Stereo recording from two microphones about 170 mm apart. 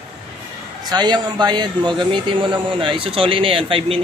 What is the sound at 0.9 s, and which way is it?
Speech, 25° right (ahead or behind).